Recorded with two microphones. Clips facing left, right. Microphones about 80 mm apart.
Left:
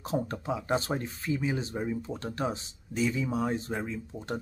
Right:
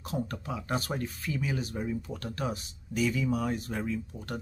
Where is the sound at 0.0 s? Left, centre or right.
Left.